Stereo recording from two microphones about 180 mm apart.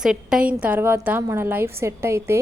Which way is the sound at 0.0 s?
5° right (ahead or behind).